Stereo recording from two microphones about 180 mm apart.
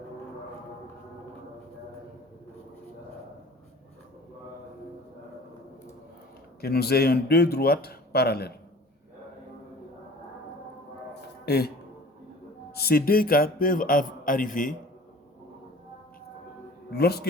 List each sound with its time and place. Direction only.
6.6 s speech: 60° left (ahead or behind)
11.1 s music: 65° left (ahead or behind)
12.7 s a man's voice: 60° left (ahead or behind)
17.0 s speech: 60° left (ahead or behind)